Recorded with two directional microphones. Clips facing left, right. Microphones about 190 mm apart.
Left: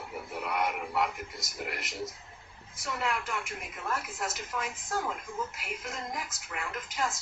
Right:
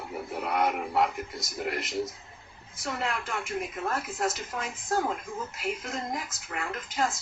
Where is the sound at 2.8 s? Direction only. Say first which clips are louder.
Right 1 dB; 30° right (ahead or behind).